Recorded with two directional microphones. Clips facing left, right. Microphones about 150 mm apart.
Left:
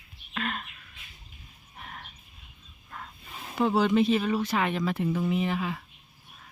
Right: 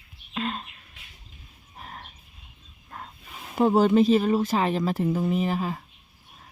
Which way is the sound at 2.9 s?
35° right (ahead or behind).